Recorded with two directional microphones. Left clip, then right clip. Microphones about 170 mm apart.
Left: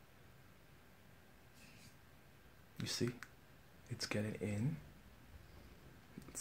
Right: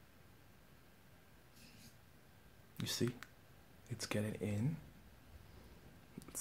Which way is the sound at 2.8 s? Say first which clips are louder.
Right 1 dB; 15° right (ahead or behind).